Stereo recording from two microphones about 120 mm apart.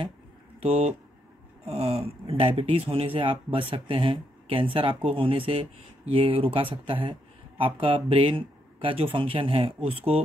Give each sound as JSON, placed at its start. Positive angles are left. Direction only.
{"t": 0.6, "sound": "speech", "side_deg": -55}